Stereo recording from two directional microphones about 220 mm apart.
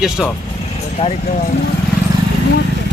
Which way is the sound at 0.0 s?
Centre (ahead or behind).